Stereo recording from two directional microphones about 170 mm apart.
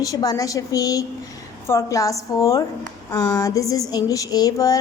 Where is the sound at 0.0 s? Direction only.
20° left (ahead or behind).